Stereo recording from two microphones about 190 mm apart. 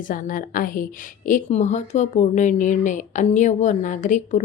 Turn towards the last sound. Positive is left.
turn(degrees=40)  # may be behind; listen again after turning